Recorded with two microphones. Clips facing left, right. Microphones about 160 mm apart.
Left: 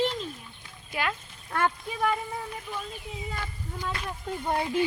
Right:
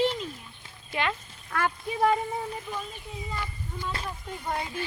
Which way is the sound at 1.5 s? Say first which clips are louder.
Left 2 dB; 30° left (ahead or behind).